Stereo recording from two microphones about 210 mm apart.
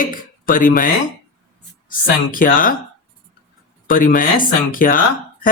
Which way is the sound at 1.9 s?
40° left (ahead or behind).